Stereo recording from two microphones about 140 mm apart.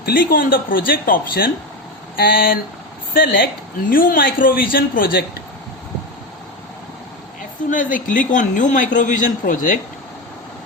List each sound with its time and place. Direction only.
0.0 s speech: 90° left
3.8 s speech: 90° left
7.7 s a woman's voice: 70° left (ahead or behind)